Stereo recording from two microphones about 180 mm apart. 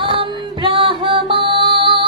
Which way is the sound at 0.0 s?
30° right (ahead or behind).